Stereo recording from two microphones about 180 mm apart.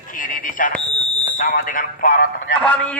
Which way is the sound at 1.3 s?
50° left (ahead or behind).